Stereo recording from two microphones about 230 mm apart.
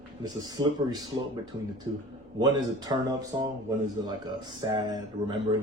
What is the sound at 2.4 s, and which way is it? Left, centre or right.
Speech, centre.